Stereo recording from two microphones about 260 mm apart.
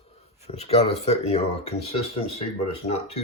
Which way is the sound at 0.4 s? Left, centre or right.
Left.